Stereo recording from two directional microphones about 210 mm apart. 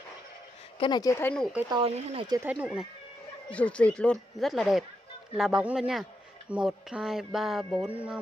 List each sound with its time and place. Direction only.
0.7 s speech: 20° left (ahead or behind)
1.7 s speech: 25° right (ahead or behind)
2.2 s speech: 15° right (ahead or behind)
2.5 s a sound: 5° right (ahead or behind)